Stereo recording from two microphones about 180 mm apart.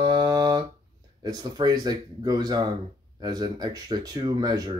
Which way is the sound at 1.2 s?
20° right (ahead or behind).